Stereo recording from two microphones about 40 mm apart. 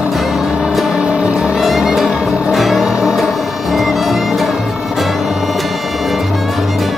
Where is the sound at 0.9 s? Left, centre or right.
Right.